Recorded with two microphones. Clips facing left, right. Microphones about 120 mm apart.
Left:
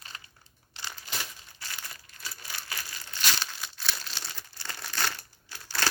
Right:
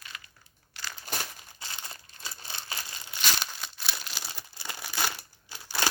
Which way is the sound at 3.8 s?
5° right (ahead or behind).